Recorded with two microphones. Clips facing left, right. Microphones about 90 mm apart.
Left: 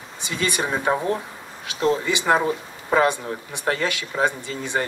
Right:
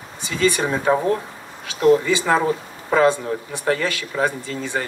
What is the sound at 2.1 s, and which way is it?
A man's voice, 15° left (ahead or behind).